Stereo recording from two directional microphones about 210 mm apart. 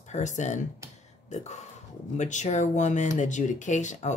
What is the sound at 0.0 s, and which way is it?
Speech, 35° left (ahead or behind).